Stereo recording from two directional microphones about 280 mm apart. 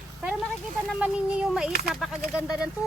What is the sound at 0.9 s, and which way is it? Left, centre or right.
Speech, centre.